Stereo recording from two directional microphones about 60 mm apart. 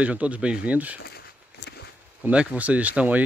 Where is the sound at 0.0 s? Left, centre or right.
Right.